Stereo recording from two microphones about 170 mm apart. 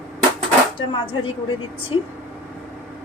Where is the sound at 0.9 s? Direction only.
30° left (ahead or behind).